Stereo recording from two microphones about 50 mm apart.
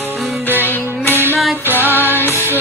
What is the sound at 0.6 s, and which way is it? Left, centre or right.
Music, left.